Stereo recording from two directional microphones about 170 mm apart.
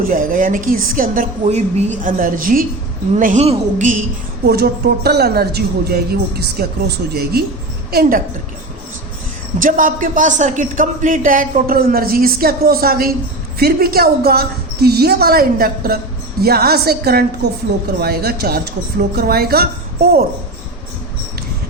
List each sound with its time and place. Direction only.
0.0 s speech: 55° right (ahead or behind)
4.4 s a woman's voice: 70° right (ahead or behind)
9.6 s a woman's voice: 50° right (ahead or behind)